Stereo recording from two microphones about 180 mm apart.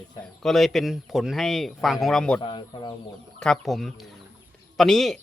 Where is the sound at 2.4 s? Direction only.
25° left (ahead or behind).